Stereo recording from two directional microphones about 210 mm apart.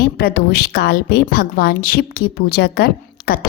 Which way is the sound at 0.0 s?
45° left (ahead or behind).